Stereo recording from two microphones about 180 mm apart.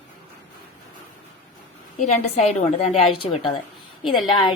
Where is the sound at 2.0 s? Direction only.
40° left (ahead or behind).